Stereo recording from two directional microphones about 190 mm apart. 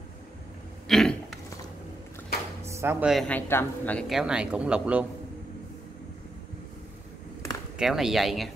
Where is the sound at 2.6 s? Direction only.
15° right (ahead or behind).